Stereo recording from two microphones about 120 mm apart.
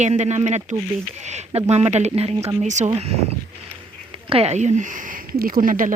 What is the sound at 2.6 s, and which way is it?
Speech, 85° right.